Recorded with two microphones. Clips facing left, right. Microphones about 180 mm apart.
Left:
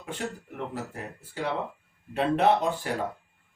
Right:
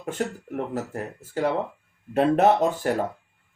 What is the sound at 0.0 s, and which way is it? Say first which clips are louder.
Speech: right 6 dB; 45° right (ahead or behind).